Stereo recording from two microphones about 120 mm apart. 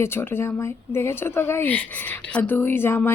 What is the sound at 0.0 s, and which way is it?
A woman's voice, 20° left (ahead or behind).